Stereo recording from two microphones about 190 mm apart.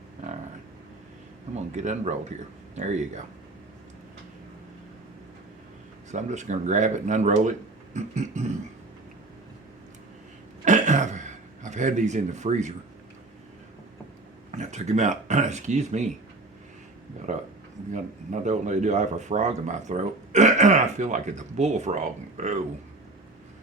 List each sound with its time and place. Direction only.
1.5 s speech: 40° right (ahead or behind)
6.1 s speech: 40° right (ahead or behind)
10.7 s throat clearing: 40° right (ahead or behind)
14.5 s speech: 35° right (ahead or behind)
17.3 s speech: 40° right (ahead or behind)